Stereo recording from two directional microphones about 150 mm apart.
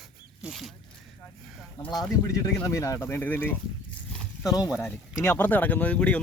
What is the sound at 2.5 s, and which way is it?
Speech, 20° left (ahead or behind).